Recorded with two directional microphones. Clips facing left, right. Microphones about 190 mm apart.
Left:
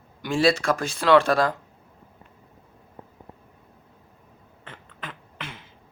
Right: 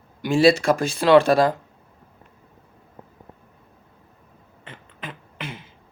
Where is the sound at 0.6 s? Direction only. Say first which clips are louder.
Right 4 dB; 25° right (ahead or behind).